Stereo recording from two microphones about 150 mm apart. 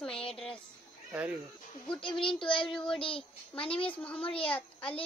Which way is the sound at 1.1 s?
10° right (ahead or behind).